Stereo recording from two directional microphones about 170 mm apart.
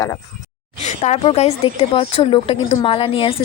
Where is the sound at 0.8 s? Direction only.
45° left (ahead or behind).